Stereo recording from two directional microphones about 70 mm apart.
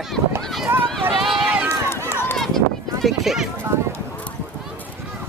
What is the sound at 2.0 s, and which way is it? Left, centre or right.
Run, left.